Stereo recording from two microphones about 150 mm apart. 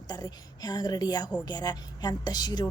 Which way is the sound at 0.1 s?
25° left (ahead or behind).